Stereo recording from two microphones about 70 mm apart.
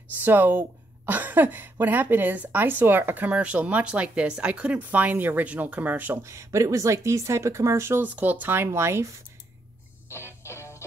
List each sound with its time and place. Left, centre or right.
0.1 s speech: right
6.2 s speech: right
8.0 s speech: right
8.6 s speech: right
10.0 s music: left